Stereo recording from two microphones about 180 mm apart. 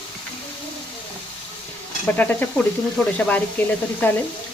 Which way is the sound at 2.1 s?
10° left (ahead or behind).